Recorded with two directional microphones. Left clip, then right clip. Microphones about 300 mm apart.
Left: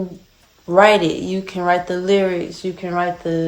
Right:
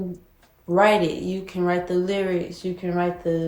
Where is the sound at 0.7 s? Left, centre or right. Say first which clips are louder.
Left 6 dB; left.